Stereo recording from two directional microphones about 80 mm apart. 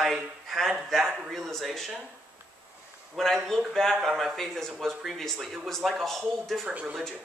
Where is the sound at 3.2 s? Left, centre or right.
Centre.